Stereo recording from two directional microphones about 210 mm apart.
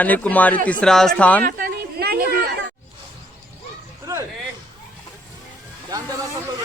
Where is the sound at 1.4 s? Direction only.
45° right (ahead or behind).